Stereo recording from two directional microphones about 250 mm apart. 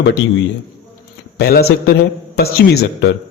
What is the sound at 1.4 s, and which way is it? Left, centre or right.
A man's voice, left.